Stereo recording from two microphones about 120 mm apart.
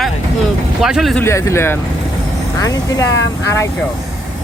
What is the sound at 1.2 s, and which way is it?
Speech, 20° left (ahead or behind).